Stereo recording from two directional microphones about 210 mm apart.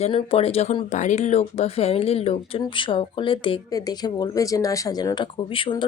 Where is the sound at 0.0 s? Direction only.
25° left (ahead or behind).